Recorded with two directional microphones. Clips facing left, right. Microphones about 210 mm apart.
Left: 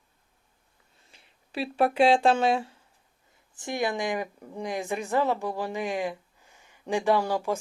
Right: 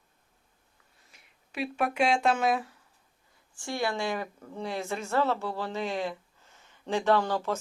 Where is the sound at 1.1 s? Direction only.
30° left (ahead or behind).